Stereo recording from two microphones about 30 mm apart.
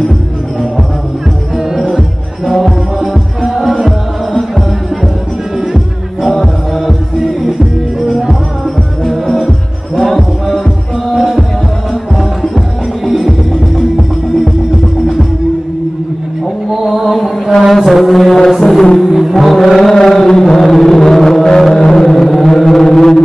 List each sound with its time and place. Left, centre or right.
2.6 s music: centre
6.2 s music: centre
9.1 s music: centre
11.1 s music: centre
13.7 s music: centre
17.1 s mantra: centre
18.6 s music: centre
19.3 s chant: centre
19.9 s a sound: centre
22.2 s a sound: centre
22.8 s a sound: left